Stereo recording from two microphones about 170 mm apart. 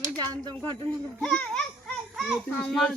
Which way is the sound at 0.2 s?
25° right (ahead or behind).